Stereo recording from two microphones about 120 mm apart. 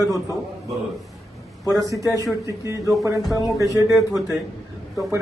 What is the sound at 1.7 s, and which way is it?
Speech, 30° right (ahead or behind).